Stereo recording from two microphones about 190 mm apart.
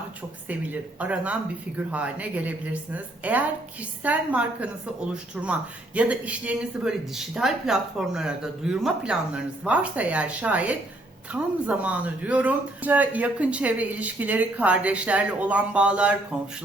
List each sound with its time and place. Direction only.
0.4 s speech: 10° right (ahead or behind)